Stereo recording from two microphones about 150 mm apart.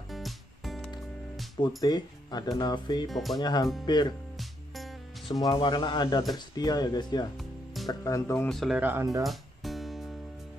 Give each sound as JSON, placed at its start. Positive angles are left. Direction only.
{"t": 0.1, "sound": "music", "side_deg": 0}
{"t": 1.8, "sound": "speech", "side_deg": 25}
{"t": 3.1, "sound": "speech", "side_deg": 0}
{"t": 3.3, "sound": "speech", "side_deg": 25}
{"t": 5.3, "sound": "speech", "side_deg": 30}
{"t": 8.5, "sound": "speech", "side_deg": 0}
{"t": 9.2, "sound": "music", "side_deg": 0}